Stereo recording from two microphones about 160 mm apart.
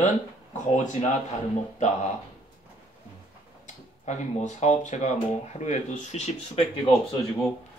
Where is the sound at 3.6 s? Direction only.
45° left (ahead or behind).